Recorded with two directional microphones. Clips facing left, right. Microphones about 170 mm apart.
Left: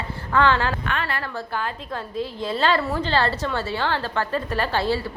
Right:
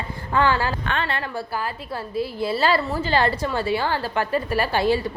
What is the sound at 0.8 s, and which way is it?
Speech, 30° right (ahead or behind).